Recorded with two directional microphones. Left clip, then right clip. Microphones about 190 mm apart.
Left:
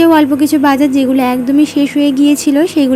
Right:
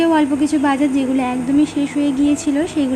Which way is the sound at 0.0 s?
25° left (ahead or behind).